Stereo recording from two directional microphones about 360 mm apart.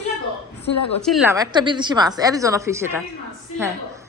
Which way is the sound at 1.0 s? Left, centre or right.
Centre.